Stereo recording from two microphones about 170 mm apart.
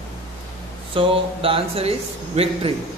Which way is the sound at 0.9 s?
30° right (ahead or behind).